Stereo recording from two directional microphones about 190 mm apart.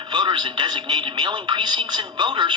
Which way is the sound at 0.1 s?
25° right (ahead or behind).